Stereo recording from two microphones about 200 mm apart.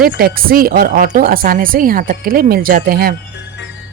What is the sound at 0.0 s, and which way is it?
Speech, 45° right (ahead or behind).